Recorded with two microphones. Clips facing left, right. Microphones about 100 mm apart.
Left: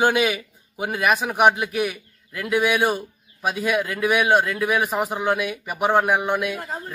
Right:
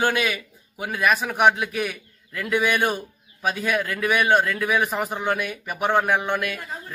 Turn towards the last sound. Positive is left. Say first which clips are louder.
# left 2 dB
turn(degrees=5)  # may be behind; listen again after turning